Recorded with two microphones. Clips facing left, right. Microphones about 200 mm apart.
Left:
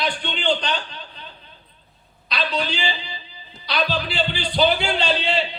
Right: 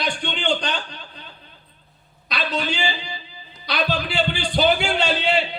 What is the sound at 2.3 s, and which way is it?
A man's voice, 45° right (ahead or behind).